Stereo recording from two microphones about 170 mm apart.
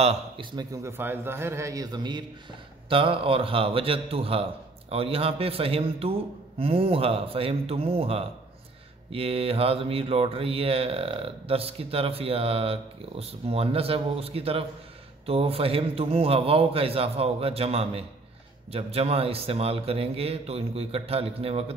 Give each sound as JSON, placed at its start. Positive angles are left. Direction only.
{"t": 0.0, "sound": "a man's voice", "side_deg": -35}
{"t": 0.8, "sound": "a man's voice", "side_deg": -15}
{"t": 2.9, "sound": "mantra", "side_deg": -30}